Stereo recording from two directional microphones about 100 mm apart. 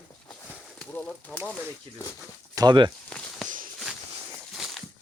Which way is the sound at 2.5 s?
45° right (ahead or behind).